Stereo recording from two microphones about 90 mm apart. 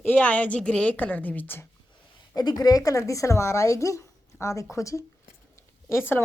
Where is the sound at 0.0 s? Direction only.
20° left (ahead or behind).